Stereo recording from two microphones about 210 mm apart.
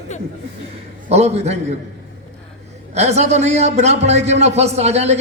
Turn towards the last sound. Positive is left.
turn(degrees=-30)  # may be behind; listen again after turning